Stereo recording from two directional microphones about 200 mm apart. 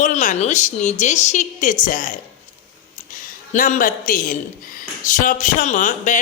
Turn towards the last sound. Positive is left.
turn(degrees=40)  # may be behind; listen again after turning